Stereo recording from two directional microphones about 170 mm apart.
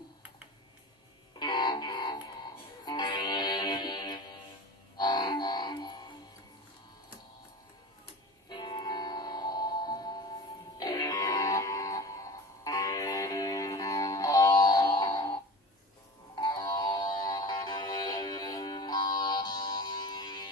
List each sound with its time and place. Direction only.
1.4 s music: 25° left (ahead or behind)
8.5 s music: 25° left (ahead or behind)
16.3 s music: 25° left (ahead or behind)